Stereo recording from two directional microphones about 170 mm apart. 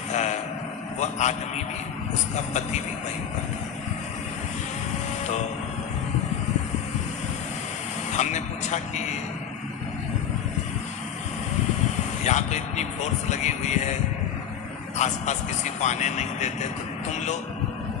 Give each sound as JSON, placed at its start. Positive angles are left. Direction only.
{"t": 0.1, "sound": "vehicle", "side_deg": 45}
{"t": 0.9, "sound": "a man's voice", "side_deg": 45}
{"t": 8.1, "sound": "speech", "side_deg": 45}
{"t": 12.2, "sound": "speech", "side_deg": 45}
{"t": 14.9, "sound": "speech", "side_deg": 45}